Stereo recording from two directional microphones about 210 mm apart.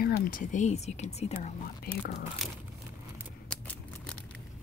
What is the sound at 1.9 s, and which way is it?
Speech, 50° left (ahead or behind).